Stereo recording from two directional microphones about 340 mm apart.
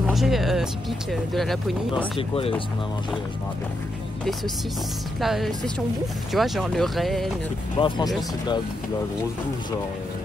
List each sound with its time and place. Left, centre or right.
0.0 s speech: centre
2.1 s speech: centre
5.2 s speech: centre
7.7 s speech: centre